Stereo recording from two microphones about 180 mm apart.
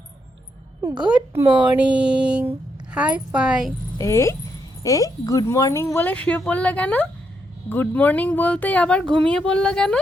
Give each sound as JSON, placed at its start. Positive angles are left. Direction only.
{"t": 0.8, "sound": "a woman's voice", "side_deg": -15}
{"t": 3.9, "sound": "speech", "side_deg": 15}